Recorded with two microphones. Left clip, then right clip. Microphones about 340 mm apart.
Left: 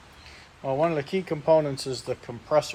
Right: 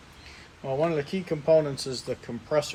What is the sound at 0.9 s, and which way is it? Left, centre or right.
Speech, left.